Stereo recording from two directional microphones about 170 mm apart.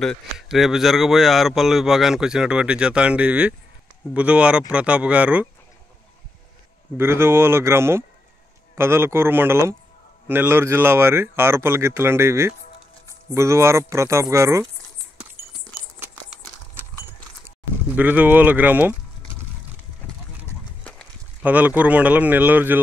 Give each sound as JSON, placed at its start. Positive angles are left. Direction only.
{"t": 0.0, "sound": "speech", "side_deg": 0}
{"t": 7.0, "sound": "speech", "side_deg": -15}
{"t": 17.8, "sound": "speech", "side_deg": -10}
{"t": 20.4, "sound": "goat", "side_deg": 5}
{"t": 21.4, "sound": "speech", "side_deg": -10}